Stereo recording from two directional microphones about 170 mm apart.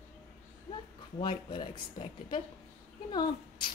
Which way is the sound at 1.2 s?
30° left (ahead or behind).